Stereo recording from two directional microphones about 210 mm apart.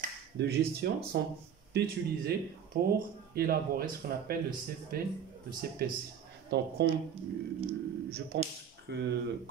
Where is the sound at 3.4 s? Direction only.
45° right (ahead or behind).